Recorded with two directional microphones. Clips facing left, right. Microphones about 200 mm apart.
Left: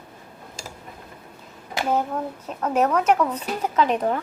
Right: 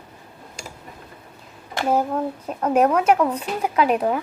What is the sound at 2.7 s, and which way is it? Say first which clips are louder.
Speech: right 2 dB; 10° right (ahead or behind).